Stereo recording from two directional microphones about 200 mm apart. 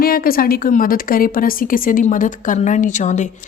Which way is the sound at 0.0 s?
45° left (ahead or behind).